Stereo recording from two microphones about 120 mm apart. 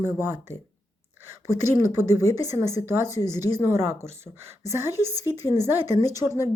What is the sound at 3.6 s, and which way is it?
Speech, 20° right (ahead or behind).